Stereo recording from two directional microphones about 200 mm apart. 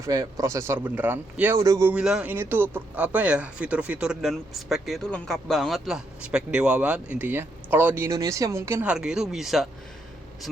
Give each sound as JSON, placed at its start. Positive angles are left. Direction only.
{"t": 0.0, "sound": "speech", "side_deg": -15}